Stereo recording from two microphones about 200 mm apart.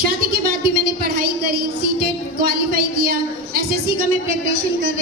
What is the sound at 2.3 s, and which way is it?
Speech, 50° right (ahead or behind).